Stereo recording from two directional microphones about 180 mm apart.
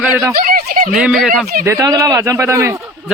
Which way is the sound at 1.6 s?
15° right (ahead or behind).